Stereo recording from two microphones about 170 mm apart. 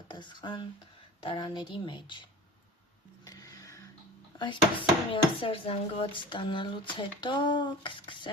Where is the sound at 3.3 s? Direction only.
20° left (ahead or behind).